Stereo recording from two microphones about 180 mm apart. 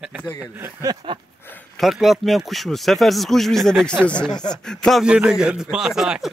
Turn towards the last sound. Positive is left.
turn(degrees=-5)  # may be behind; listen again after turning